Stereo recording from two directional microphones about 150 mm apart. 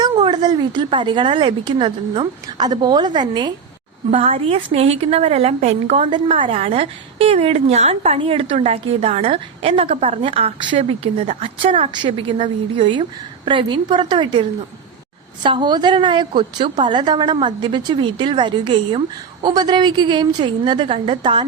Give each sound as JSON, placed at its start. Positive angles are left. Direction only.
{"t": 0.1, "sound": "a woman's voice", "side_deg": -30}
{"t": 4.1, "sound": "a woman's voice", "side_deg": -40}
{"t": 6.1, "sound": "a woman's voice", "side_deg": -35}
{"t": 15.4, "sound": "a woman's voice", "side_deg": -30}